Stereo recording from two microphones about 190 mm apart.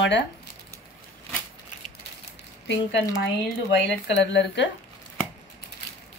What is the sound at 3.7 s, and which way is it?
Speech, 65° left (ahead or behind).